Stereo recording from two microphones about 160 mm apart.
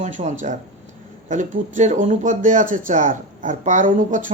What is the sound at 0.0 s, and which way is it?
Speech, 50° right (ahead or behind).